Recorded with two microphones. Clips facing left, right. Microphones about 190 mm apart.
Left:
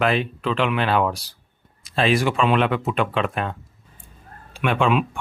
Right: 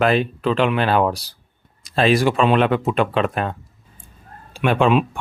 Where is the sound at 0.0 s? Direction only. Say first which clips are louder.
Right 4 dB; 40° right (ahead or behind).